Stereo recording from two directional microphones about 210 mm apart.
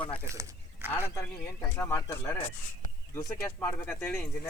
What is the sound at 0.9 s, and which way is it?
Speech, 15° left (ahead or behind).